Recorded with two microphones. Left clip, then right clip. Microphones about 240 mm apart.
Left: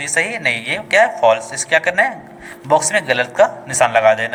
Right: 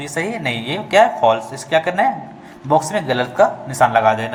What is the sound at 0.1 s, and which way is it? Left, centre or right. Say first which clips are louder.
Speech: left 5 dB; left.